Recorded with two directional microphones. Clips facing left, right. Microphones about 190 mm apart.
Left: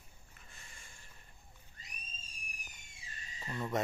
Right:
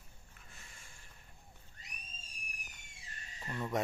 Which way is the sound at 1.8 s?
65° right (ahead or behind).